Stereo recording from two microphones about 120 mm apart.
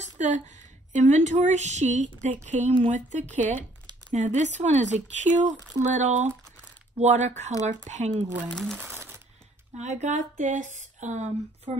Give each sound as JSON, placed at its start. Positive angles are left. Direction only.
{"t": 0.2, "sound": "a woman's voice", "side_deg": -70}
{"t": 0.9, "sound": "a woman's voice", "side_deg": -80}
{"t": 8.5, "sound": "speech", "side_deg": 5}
{"t": 8.8, "sound": "a sound", "side_deg": -20}
{"t": 9.8, "sound": "speech", "side_deg": -70}